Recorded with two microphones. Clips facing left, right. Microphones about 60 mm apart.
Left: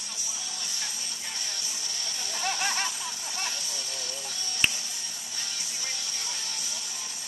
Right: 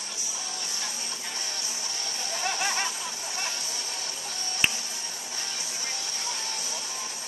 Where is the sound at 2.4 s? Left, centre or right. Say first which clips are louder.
Even; right.